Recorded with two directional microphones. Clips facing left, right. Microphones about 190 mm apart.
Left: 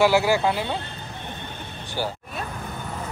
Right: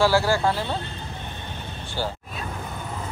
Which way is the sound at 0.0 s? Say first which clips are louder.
Left 1 dB; 15° left (ahead or behind).